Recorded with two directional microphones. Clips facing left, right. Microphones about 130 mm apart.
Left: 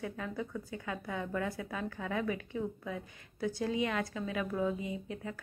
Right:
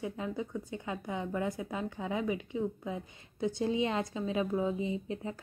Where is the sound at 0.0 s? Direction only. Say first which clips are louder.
Right 2 dB; 20° right (ahead or behind).